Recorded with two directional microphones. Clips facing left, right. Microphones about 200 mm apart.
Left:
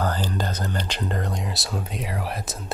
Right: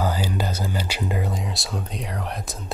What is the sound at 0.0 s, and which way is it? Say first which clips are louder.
Speech: right 1 dB; 10° right (ahead or behind).